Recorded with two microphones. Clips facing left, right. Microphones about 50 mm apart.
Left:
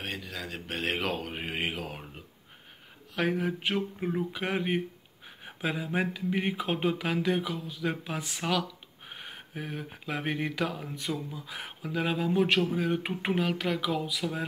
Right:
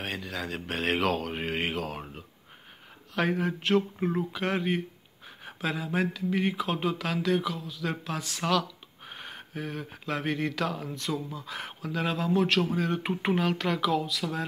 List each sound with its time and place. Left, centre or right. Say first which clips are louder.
0.0 s speech: right 3 dB; centre
3.2 s speech: right 1 dB; centre; by 12.6 s left
12.7 s speech: right 1 dB; centre